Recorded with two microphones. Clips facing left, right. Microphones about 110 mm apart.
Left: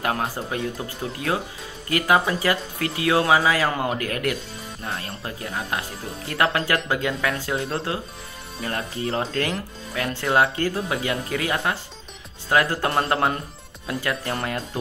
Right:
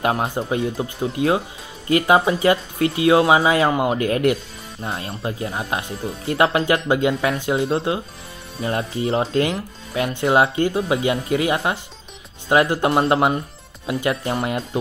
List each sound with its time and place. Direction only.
0.0 s speech: 25° right (ahead or behind)